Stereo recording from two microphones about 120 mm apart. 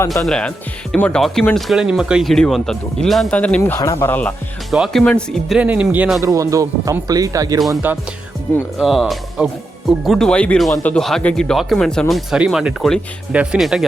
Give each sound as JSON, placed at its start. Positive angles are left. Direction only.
{"t": 0.1, "sound": "speech", "side_deg": 5}
{"t": 3.6, "sound": "speech", "side_deg": 25}
{"t": 4.1, "sound": "speech", "side_deg": 10}
{"t": 4.7, "sound": "speech", "side_deg": 0}
{"t": 5.5, "sound": "speech", "side_deg": -10}
{"t": 6.2, "sound": "speech", "side_deg": -25}
{"t": 7.8, "sound": "speech", "side_deg": -15}
{"t": 8.8, "sound": "speech", "side_deg": 0}